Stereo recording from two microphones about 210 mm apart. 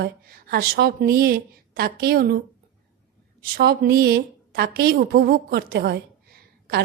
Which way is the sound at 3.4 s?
45° right (ahead or behind).